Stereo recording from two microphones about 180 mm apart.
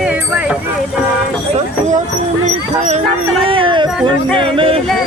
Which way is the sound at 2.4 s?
40° right (ahead or behind).